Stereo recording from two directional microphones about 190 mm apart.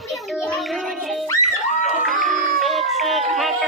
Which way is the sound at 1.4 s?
Centre (ahead or behind).